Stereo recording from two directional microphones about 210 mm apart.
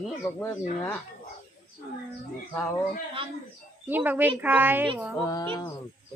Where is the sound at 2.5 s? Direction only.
10° left (ahead or behind).